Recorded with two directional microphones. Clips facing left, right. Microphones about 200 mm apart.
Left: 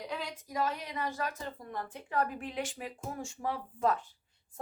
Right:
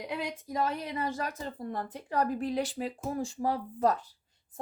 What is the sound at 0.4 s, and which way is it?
Speech, 30° right (ahead or behind).